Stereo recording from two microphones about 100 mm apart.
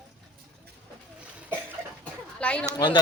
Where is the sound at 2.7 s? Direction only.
50° left (ahead or behind).